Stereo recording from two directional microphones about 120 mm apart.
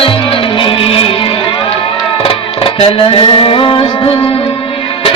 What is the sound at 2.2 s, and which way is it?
Music, 50° left (ahead or behind).